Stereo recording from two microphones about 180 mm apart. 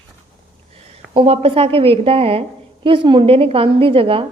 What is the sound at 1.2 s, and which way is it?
A woman's voice, 35° right (ahead or behind).